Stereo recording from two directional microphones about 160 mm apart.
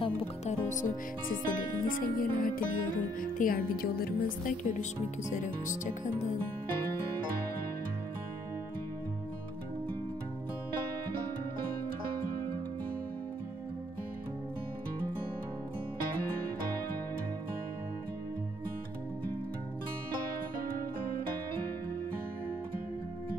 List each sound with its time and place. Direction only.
0.0 s speech: 40° left (ahead or behind)
1.5 s music: 60° left (ahead or behind)
5.3 s speech: 50° left (ahead or behind)